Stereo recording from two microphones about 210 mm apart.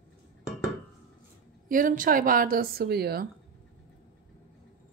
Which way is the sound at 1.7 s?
40° right (ahead or behind).